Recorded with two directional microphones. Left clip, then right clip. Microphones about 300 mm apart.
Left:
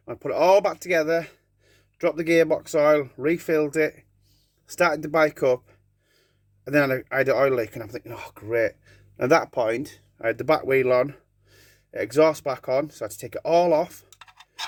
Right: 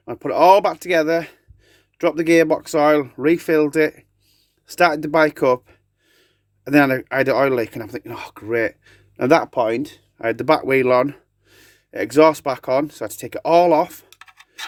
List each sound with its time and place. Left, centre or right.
0.0 s speech: right